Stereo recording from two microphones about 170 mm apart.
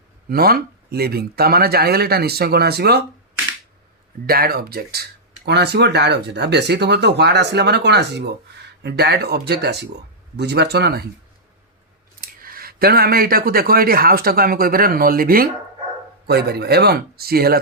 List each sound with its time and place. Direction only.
0.3 s speech: 60° right (ahead or behind)
4.3 s speech: 65° right (ahead or behind)
5.5 s speech: 75° right (ahead or behind)
12.2 s speech: 60° right (ahead or behind)
16.2 s speech: 70° right (ahead or behind)